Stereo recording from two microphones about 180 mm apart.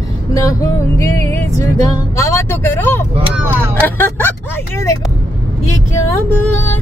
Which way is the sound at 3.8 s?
10° left (ahead or behind).